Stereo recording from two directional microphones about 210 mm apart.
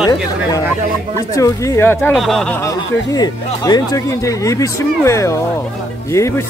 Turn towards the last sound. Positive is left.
turn(degrees=15)  # may be behind; listen again after turning